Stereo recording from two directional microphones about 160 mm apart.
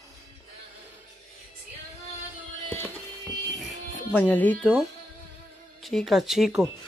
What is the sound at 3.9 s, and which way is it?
Speech, 10° left (ahead or behind).